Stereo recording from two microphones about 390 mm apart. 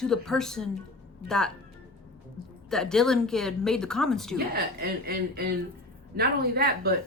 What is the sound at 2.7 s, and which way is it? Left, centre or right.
Speech, centre.